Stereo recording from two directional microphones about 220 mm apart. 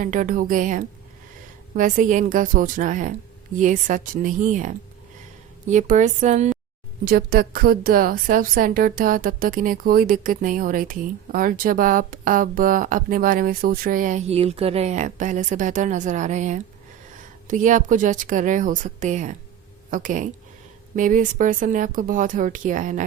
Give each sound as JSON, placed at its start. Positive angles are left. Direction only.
{"t": 0.0, "sound": "a woman's voice", "side_deg": -35}